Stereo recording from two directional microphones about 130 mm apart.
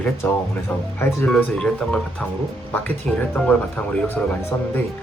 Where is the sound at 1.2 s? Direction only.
5° left (ahead or behind).